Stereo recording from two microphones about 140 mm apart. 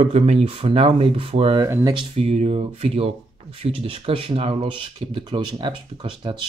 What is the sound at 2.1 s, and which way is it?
Speech, 50° right (ahead or behind).